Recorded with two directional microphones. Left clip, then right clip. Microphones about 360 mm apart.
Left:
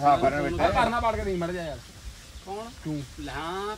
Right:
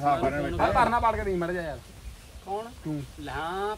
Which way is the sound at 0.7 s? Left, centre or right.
Centre.